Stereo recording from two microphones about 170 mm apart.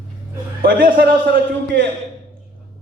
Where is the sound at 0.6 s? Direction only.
60° right (ahead or behind).